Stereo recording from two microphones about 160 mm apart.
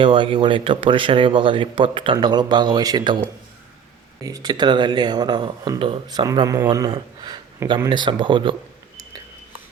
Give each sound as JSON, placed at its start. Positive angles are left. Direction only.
{"t": 0.0, "sound": "speech", "side_deg": -30}
{"t": 4.2, "sound": "speech", "side_deg": -20}